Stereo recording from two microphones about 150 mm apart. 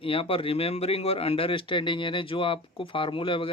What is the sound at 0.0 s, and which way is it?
Speech, 35° left (ahead or behind).